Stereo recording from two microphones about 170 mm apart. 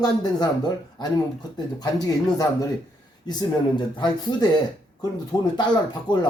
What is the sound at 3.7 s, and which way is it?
Speech, 25° left (ahead or behind).